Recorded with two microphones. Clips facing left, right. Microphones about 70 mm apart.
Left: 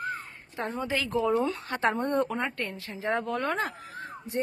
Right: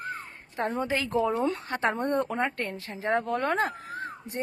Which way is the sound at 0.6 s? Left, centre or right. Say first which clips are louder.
Right 2 dB; right.